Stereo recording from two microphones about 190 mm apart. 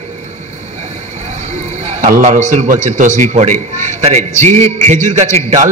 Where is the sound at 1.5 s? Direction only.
35° right (ahead or behind).